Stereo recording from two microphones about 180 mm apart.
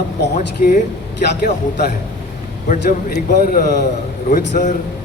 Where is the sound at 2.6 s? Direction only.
50° left (ahead or behind).